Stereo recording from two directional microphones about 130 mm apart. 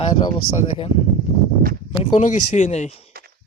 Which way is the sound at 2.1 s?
70° left (ahead or behind).